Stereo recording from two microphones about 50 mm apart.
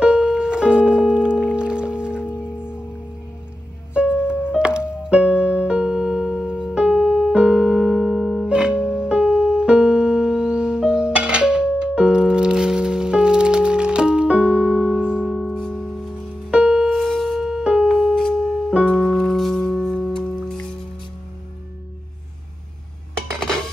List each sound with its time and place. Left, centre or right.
0.0 s music: centre
2.2 s music: left
3.9 s music: right; by 8.5 s centre
8.5 s music: centre
15.5 s music: centre
16.4 s music: centre
16.9 s a sound: centre
17.4 s music: centre
17.8 s music: centre
19.0 s music: centre